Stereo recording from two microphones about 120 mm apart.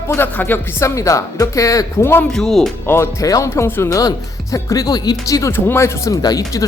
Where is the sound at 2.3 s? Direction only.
Centre (ahead or behind).